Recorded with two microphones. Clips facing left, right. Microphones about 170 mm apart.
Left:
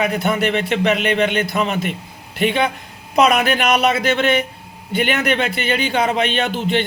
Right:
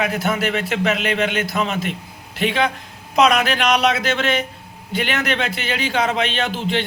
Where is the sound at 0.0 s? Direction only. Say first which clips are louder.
Left 2 dB; centre (ahead or behind).